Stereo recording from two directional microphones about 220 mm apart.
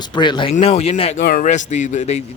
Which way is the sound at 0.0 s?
20° left (ahead or behind).